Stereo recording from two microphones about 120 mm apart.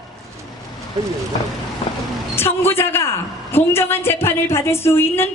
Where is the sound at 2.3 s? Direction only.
20° left (ahead or behind).